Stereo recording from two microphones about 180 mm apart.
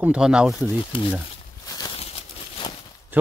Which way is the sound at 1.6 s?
20° left (ahead or behind).